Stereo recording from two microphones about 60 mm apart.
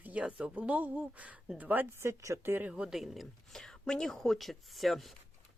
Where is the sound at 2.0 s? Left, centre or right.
Right.